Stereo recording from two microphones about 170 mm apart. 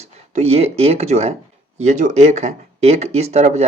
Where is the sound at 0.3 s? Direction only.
35° right (ahead or behind).